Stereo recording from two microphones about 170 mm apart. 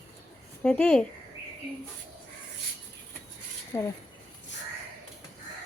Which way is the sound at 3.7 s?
15° left (ahead or behind).